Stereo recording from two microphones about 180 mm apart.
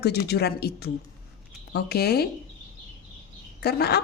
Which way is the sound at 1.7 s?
65° left (ahead or behind).